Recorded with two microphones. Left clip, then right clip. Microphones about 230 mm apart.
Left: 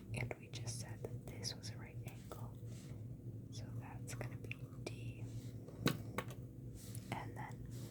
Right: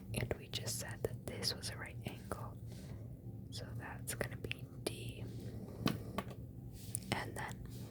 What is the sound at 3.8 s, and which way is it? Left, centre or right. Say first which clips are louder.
Whispering: right 8 dB; centre.